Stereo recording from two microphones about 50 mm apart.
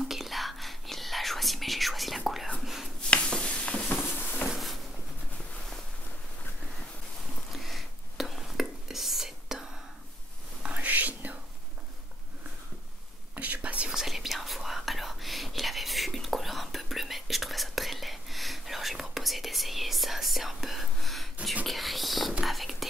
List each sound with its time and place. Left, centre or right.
0.1 s whispering: centre
2.6 s a sound: centre
3.0 s a sound: centre
7.5 s whispering: centre
10.6 s whispering: right
13.3 s whispering: right
13.8 s whispering: centre